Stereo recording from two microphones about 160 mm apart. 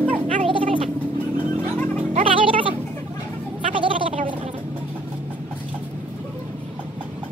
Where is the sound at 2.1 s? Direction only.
35° right (ahead or behind).